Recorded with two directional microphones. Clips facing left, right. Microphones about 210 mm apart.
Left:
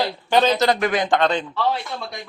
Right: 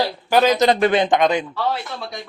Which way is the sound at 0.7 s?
30° right (ahead or behind).